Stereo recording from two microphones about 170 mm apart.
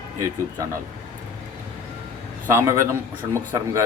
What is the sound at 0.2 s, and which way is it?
Speech, 20° right (ahead or behind).